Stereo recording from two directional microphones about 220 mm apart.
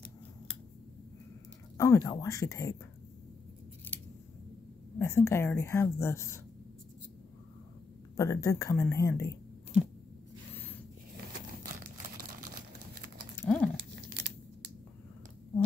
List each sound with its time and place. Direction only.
1.8 s speech: 15° left (ahead or behind)
4.9 s speech: 10° left (ahead or behind)
8.2 s speech: 15° left (ahead or behind)
10.5 s zipper: 10° left (ahead or behind)
13.4 s a sound: 10° left (ahead or behind)
13.7 s crumpling: 50° right (ahead or behind)